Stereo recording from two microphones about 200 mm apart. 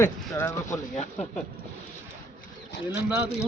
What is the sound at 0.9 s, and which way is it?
Speech, 30° left (ahead or behind).